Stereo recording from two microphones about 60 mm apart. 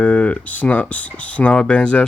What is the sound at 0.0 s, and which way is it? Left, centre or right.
Speech, left.